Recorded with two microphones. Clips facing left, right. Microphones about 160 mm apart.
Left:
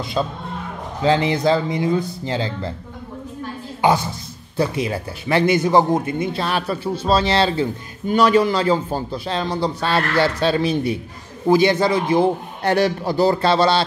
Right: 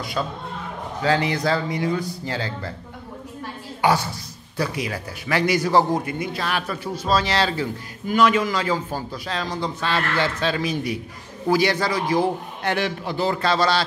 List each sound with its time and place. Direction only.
0.2 s speech: 20° left (ahead or behind)
3.8 s speech: 20° left (ahead or behind)
12.7 s a man's voice: 40° left (ahead or behind)